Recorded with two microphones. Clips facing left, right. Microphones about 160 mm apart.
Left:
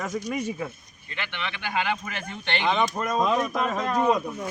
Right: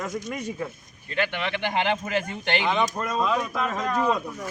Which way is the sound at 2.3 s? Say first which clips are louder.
Right 1 dB; 10° right (ahead or behind).